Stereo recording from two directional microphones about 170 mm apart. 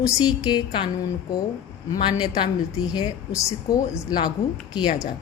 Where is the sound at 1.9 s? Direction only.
25° left (ahead or behind).